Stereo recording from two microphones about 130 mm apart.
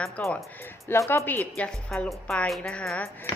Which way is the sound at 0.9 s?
20° left (ahead or behind).